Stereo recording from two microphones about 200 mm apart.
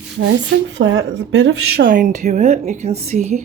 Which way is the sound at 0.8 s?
60° right (ahead or behind).